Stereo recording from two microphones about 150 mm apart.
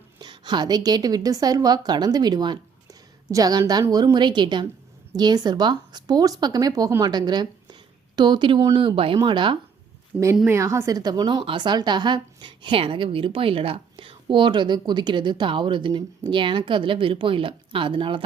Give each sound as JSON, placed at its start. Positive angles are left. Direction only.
{"t": 0.2, "sound": "a woman's voice", "side_deg": -30}
{"t": 10.1, "sound": "a woman's voice", "side_deg": -10}